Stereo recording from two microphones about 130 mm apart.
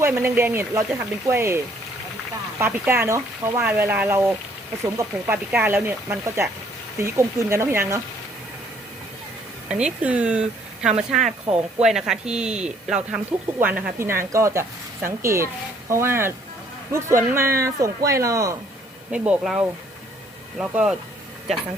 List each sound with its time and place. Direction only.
0.2 s a woman's voice: 15° right (ahead or behind)
2.6 s a woman's voice: 15° right (ahead or behind)
9.6 s a woman's voice: 10° right (ahead or behind); by 18.5 s 25° right (ahead or behind)
19.1 s speech: 10° right (ahead or behind)